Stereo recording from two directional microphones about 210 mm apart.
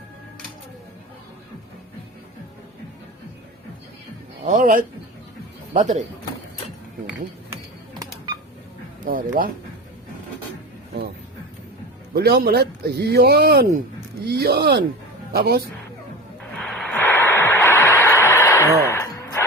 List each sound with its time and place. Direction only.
4.4 s a man's voice: 35° right (ahead or behind)
9.0 s a man's voice: 40° right (ahead or behind)
12.1 s speech: 45° right (ahead or behind)
16.6 s radio: 5° left (ahead or behind)
18.9 s a sound: 15° left (ahead or behind)